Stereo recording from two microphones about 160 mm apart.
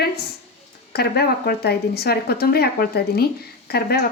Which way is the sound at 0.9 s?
85° left.